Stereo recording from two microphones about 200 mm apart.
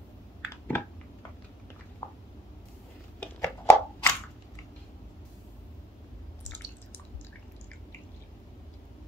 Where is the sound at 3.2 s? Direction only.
5° left (ahead or behind).